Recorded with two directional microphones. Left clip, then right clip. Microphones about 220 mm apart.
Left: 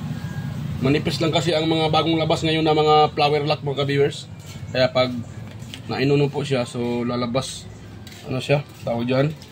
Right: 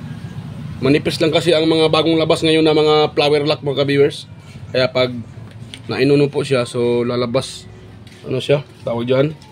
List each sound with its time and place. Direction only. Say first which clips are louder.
0.8 s speech: right 6 dB; 50° right (ahead or behind)